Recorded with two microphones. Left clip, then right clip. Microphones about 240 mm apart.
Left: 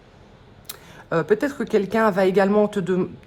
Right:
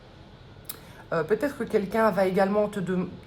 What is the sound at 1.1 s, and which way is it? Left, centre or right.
Speech, left.